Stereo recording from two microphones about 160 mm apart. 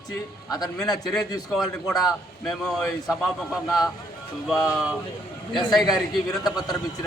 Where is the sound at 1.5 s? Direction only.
Centre (ahead or behind).